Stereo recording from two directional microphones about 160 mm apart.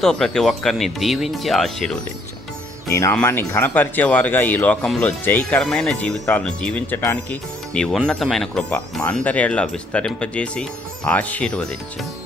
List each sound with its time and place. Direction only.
0.0 s speech: 5° left (ahead or behind)
2.9 s speech: 20° left (ahead or behind)